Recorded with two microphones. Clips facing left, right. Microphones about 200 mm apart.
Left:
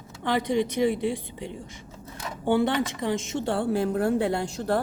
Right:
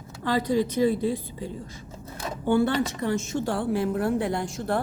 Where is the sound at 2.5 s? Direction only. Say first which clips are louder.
Right 1 dB; 20° left (ahead or behind).